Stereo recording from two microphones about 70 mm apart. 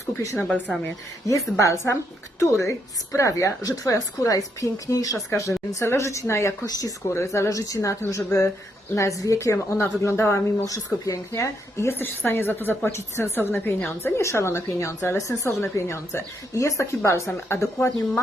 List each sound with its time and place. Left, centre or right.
1.3 s speech: left
5.3 s speech: left
6.7 s speech: left
7.1 s speech: left
10.7 s speech: left
11.9 s a woman's voice: left
14.2 s speech: left